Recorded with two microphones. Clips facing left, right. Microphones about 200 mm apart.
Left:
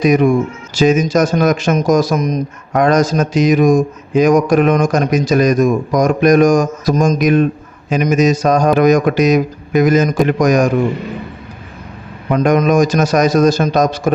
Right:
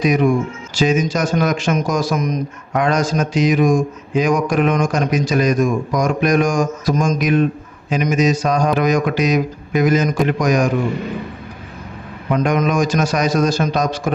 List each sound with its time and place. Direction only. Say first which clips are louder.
0.8 s a man's voice: left 5 dB; 45° left (ahead or behind)
12.3 s speech: left 5 dB; 50° left (ahead or behind)